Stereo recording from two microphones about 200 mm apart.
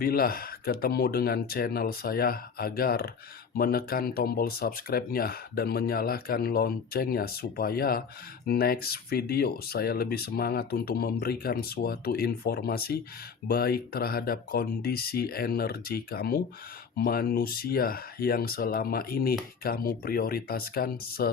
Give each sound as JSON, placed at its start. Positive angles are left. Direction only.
{"t": 0.0, "sound": "speech", "side_deg": 50}